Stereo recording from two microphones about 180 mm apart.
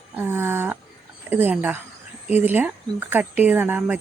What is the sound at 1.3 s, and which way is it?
Speech, 10° right (ahead or behind).